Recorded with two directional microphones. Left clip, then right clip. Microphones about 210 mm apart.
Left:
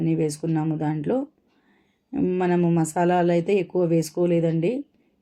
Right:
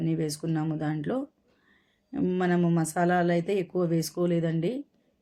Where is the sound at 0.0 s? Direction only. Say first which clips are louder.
Left 6 dB; 5° left (ahead or behind).